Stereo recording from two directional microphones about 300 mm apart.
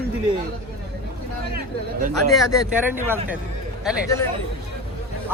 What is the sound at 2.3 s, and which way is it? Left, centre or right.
Speech, centre.